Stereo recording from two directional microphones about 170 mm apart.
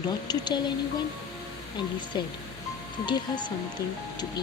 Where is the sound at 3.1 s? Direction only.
25° left (ahead or behind).